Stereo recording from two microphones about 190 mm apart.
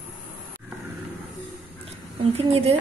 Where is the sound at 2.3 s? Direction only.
30° right (ahead or behind).